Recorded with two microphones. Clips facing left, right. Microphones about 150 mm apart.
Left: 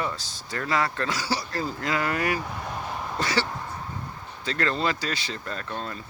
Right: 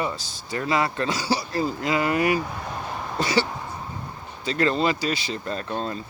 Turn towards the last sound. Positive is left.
turn(degrees=-25)  # may be behind; listen again after turning